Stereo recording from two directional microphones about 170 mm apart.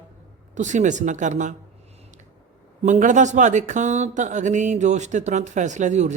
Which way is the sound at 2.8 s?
45° right (ahead or behind).